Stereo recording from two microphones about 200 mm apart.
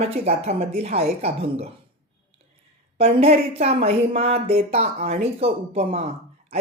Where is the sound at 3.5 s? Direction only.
30° right (ahead or behind).